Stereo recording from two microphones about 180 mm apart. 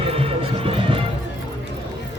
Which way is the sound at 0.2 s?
30° right (ahead or behind).